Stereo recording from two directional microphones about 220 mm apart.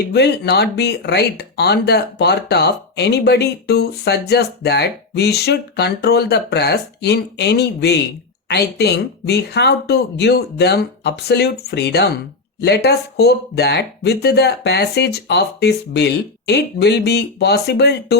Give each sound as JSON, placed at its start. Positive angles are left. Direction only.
{"t": 0.1, "sound": "speech", "side_deg": 50}